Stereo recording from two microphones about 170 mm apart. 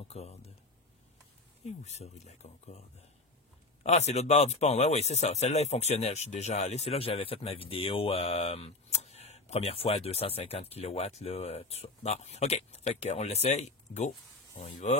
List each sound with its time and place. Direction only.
0.1 s speech: 40° left (ahead or behind)
1.6 s speech: 40° left (ahead or behind)
3.8 s speech: 40° left (ahead or behind)